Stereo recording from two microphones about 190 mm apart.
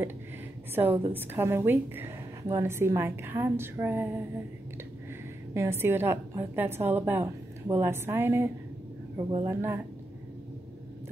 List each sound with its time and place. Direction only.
0.7 s a woman's voice: 10° right (ahead or behind)
5.5 s a woman's voice: 15° right (ahead or behind)
9.1 s speech: 30° right (ahead or behind)
9.5 s a woman's voice: 15° right (ahead or behind)